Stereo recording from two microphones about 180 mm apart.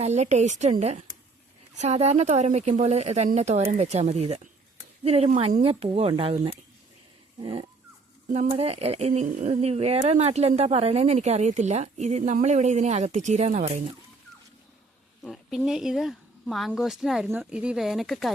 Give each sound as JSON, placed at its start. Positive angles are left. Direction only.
{"t": 0.0, "sound": "speech", "side_deg": -40}
{"t": 7.4, "sound": "dog", "side_deg": -30}
{"t": 8.3, "sound": "speech", "side_deg": -35}
{"t": 15.2, "sound": "speech", "side_deg": 0}